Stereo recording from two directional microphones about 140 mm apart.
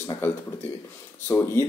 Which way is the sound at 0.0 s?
15° left (ahead or behind).